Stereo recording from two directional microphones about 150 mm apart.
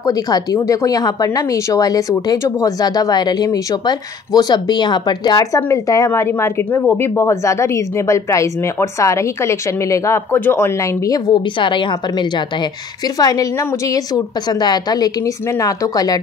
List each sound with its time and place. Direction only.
0.0 s speech: 25° left (ahead or behind)